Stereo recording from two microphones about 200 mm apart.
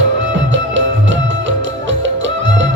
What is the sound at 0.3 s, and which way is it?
Music, 70° right (ahead or behind).